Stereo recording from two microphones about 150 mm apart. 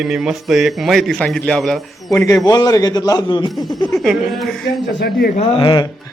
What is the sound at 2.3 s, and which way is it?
A man's voice, 25° left (ahead or behind).